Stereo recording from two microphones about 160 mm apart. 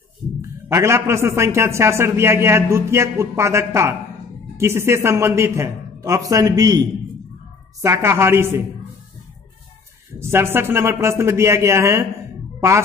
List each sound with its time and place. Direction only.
0.4 s a man's voice: 15° right (ahead or behind)
7.8 s a man's voice: 15° right (ahead or behind)
10.1 s a man's voice: 15° right (ahead or behind)
12.5 s music: 15° right (ahead or behind)